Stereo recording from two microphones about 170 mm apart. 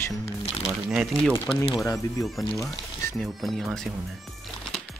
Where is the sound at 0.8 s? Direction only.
5° right (ahead or behind).